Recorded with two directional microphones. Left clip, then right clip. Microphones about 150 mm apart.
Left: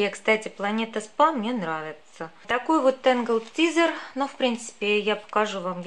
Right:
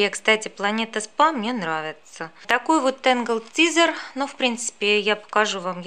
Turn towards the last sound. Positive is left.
turn(degrees=-30)  # may be behind; listen again after turning